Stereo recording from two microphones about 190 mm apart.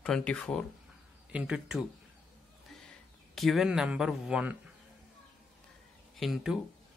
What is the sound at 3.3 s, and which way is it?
Speech, centre (ahead or behind).